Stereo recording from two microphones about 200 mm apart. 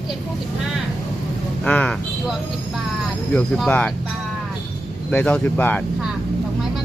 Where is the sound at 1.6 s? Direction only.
5° left (ahead or behind).